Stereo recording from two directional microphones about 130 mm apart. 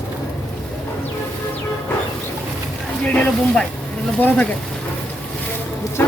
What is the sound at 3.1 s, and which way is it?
Speech, 10° left (ahead or behind).